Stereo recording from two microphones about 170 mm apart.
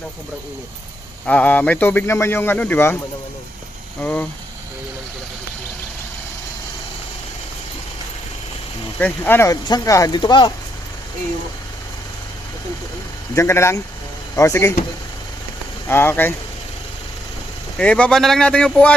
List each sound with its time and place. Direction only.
1.2 s speech: 10° left (ahead or behind)
4.0 s speech: 10° left (ahead or behind)
9.0 s speech: 10° left (ahead or behind); by 10.5 s 25° left (ahead or behind)
13.3 s speech: 15° left (ahead or behind)
15.9 s speech: 15° left (ahead or behind)
17.7 s speech: 5° left (ahead or behind)